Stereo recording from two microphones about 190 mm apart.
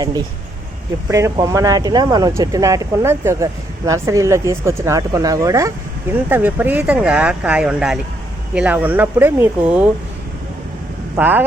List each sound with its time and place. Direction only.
1.1 s speech: 15° right (ahead or behind)
11.2 s speech: 10° right (ahead or behind)